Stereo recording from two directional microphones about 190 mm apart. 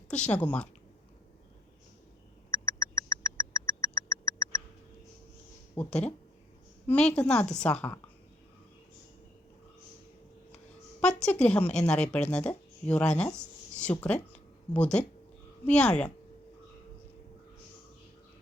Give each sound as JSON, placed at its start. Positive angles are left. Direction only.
{"t": 0.3, "sound": "speech", "side_deg": 10}
{"t": 2.5, "sound": "a sound", "side_deg": 15}
{"t": 5.7, "sound": "a woman's voice", "side_deg": 5}
{"t": 11.0, "sound": "a woman's voice", "side_deg": 5}